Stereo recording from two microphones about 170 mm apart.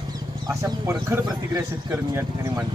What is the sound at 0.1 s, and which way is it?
Speech, 20° right (ahead or behind).